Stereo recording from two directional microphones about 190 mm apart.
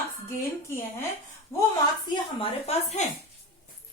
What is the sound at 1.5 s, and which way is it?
Speech, 15° left (ahead or behind).